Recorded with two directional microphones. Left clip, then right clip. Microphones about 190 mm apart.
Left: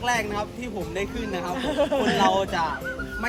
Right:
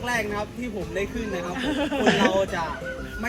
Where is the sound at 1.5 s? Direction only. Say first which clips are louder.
Left 4 dB; 55° left (ahead or behind).